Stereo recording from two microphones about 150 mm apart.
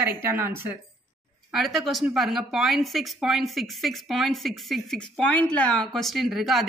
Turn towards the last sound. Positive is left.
turn(degrees=0)  # may be behind; listen again after turning